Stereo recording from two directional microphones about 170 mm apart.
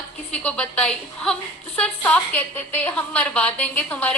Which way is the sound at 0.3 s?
5° left (ahead or behind).